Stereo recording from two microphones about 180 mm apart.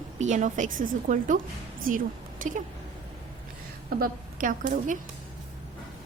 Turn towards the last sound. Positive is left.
turn(degrees=-45)  # may be behind; listen again after turning